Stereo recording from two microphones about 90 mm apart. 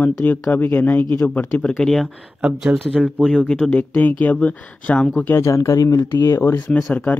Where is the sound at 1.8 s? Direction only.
5° left (ahead or behind).